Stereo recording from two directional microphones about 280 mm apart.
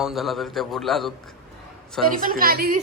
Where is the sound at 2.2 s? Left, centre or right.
Right.